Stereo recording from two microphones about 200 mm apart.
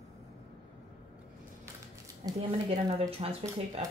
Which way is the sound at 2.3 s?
20° right (ahead or behind).